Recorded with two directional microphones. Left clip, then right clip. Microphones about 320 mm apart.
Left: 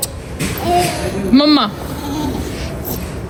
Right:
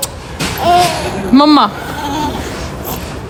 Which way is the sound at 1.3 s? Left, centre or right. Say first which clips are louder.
Right 4 dB; centre.